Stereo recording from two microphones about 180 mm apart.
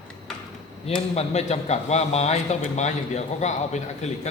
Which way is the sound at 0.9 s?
35° left (ahead or behind).